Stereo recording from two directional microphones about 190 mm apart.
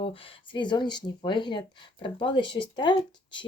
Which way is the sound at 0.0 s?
25° left (ahead or behind).